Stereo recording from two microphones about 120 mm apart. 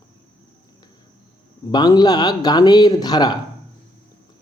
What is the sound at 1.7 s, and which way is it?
A man's voice, 35° left (ahead or behind).